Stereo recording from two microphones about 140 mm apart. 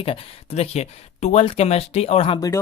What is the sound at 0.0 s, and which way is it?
Speech, 45° left (ahead or behind).